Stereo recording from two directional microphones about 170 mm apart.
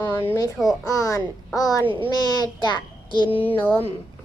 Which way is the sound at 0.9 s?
20° left (ahead or behind).